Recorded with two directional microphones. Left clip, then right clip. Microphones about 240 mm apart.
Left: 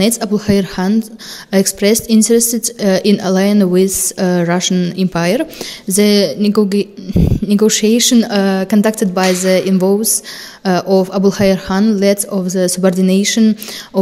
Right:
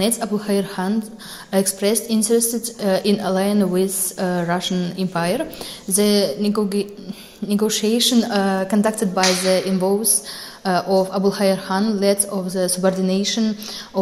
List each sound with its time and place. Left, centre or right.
0.0 s a woman's voice: left